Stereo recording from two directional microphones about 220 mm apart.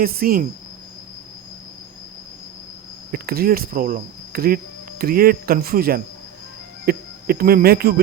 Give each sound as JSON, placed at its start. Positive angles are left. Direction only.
{"t": 0.0, "sound": "speech", "side_deg": -45}
{"t": 3.1, "sound": "speech", "side_deg": -40}